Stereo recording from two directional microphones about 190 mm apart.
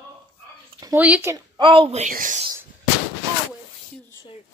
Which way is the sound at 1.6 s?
25° right (ahead or behind).